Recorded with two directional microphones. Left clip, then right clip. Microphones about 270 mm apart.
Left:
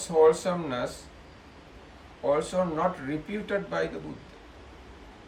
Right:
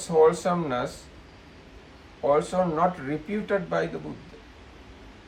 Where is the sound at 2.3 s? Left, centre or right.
Centre.